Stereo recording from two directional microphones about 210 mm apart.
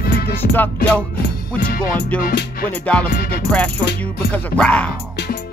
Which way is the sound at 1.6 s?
45° left (ahead or behind).